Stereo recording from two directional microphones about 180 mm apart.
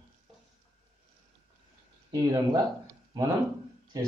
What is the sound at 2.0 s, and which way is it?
Speech, 20° right (ahead or behind).